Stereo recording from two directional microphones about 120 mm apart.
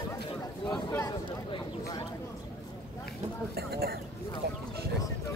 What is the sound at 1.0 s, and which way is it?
Speech, 35° left (ahead or behind).